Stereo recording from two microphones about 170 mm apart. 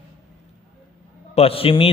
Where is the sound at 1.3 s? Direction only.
35° left (ahead or behind).